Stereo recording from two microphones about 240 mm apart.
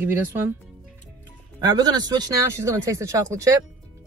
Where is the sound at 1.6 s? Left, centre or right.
Centre.